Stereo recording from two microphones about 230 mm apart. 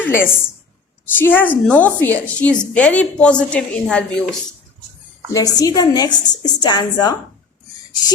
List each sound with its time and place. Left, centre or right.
0.0 s a sound: centre
1.1 s a woman's voice: centre
5.3 s a woman's voice: centre